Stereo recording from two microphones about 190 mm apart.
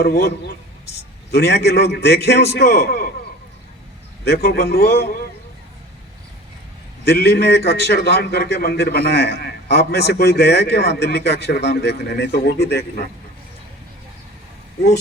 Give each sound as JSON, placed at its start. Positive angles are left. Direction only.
{"t": 0.0, "sound": "a man's voice", "side_deg": 55}
{"t": 4.4, "sound": "a man's voice", "side_deg": 55}
{"t": 7.0, "sound": "a man's voice", "side_deg": 60}